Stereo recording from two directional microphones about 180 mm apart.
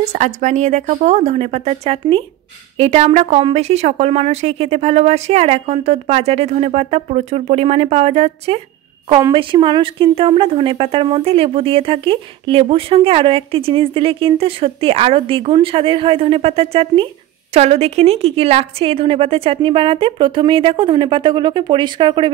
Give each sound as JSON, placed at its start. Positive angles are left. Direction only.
{"t": 0.1, "sound": "speech", "side_deg": -40}